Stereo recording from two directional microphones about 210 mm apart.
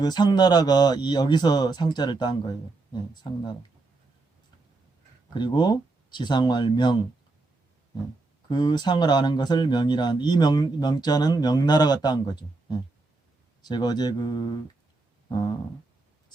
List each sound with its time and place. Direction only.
0.0 s speech: 20° left (ahead or behind)
5.3 s speech: 20° left (ahead or behind)
8.4 s speech: 20° left (ahead or behind)